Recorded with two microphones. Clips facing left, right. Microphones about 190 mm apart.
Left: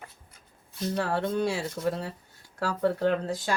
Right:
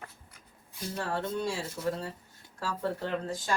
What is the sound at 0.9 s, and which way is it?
Speech, 65° left (ahead or behind).